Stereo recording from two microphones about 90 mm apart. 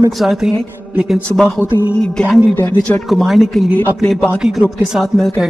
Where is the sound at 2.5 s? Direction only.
20° left (ahead or behind).